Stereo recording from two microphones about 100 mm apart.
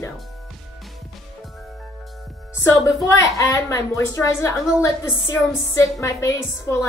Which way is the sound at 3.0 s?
35° left (ahead or behind).